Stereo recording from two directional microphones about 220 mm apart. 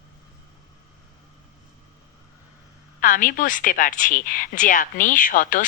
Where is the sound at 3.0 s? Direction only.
35° left (ahead or behind).